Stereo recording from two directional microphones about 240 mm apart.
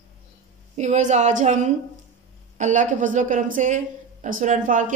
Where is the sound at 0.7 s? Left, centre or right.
Right.